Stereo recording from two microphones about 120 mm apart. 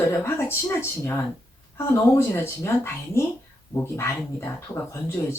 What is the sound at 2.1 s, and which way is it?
Speech, 20° left (ahead or behind).